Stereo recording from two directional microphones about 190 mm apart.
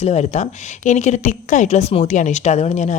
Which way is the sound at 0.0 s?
35° left (ahead or behind).